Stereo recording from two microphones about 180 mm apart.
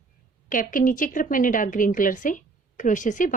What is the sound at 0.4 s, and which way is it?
A woman's voice, 50° left (ahead or behind).